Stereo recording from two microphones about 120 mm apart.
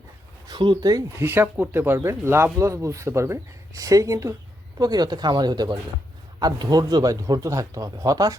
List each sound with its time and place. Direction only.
0.4 s speech: 40° right (ahead or behind)
1.2 s speech: 15° right (ahead or behind)